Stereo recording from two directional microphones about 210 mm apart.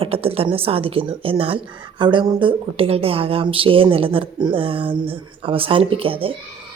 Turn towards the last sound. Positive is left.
turn(degrees=-25)  # may be behind; listen again after turning